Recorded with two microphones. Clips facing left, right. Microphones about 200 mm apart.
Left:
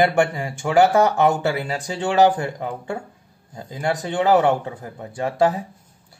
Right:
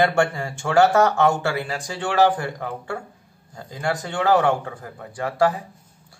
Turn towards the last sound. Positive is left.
turn(degrees=20)  # may be behind; listen again after turning